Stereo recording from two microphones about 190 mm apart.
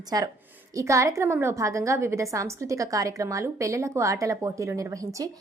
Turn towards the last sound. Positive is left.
turn(degrees=-15)  # may be behind; listen again after turning